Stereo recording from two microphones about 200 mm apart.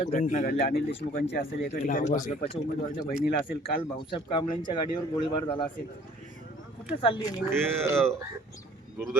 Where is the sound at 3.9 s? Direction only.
25° left (ahead or behind).